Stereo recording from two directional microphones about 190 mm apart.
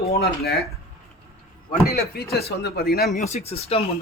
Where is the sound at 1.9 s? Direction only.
55° left (ahead or behind).